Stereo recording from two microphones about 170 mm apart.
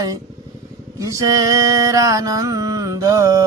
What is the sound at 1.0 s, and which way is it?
Mantra, 20° right (ahead or behind).